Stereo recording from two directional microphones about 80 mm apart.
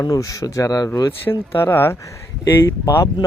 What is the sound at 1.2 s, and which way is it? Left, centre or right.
Speech, left.